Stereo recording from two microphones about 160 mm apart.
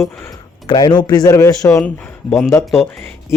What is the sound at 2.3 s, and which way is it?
Speech, centre (ahead or behind).